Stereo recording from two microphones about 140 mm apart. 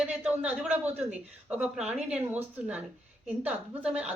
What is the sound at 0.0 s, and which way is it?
A woman's voice, 10° right (ahead or behind).